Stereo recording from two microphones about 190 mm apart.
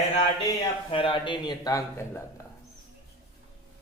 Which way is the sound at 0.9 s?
25° left (ahead or behind).